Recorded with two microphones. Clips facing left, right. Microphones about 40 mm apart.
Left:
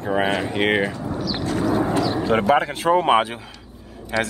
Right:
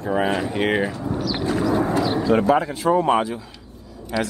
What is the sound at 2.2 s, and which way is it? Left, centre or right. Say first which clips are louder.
Speech: even; left.